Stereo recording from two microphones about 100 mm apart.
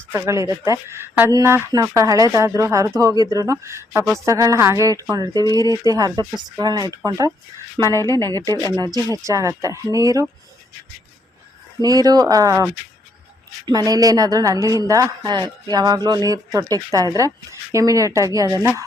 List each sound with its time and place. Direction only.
0.1 s speech: 30° right (ahead or behind)
7.8 s speech: 50° right (ahead or behind)
8.3 s speech: 40° right (ahead or behind)
11.8 s speech: 40° right (ahead or behind)
13.7 s speech: 40° right (ahead or behind)